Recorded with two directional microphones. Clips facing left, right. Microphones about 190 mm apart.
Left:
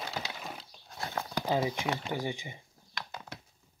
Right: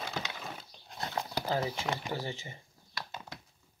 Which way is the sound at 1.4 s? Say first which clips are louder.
Left 4 dB; 15° left (ahead or behind).